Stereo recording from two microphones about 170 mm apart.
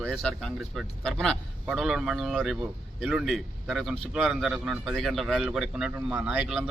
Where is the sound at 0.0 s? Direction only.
Centre (ahead or behind).